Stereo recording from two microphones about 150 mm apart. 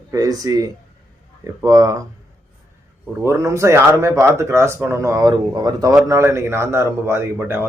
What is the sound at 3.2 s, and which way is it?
Speech, 20° right (ahead or behind).